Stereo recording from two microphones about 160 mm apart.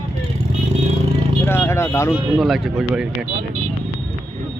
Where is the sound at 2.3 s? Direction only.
Centre (ahead or behind).